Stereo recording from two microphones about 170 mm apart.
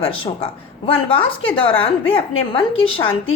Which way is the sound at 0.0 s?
35° left (ahead or behind).